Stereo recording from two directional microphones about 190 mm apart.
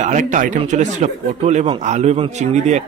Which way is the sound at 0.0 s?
40° right (ahead or behind).